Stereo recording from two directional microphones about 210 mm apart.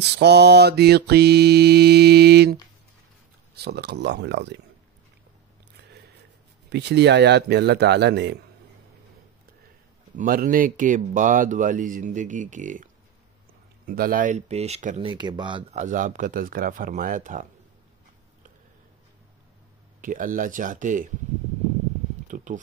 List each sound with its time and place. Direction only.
0.2 s mantra: 50° right (ahead or behind)
6.7 s mantra: 55° right (ahead or behind)
10.1 s speech: 40° right (ahead or behind)
15.0 s speech: 20° right (ahead or behind)
15.7 s speech: 35° right (ahead or behind)
20.0 s speech: 40° right (ahead or behind)
22.3 s a sound: 35° right (ahead or behind)